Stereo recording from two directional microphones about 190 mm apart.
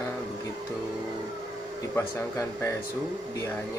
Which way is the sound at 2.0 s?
15° left (ahead or behind).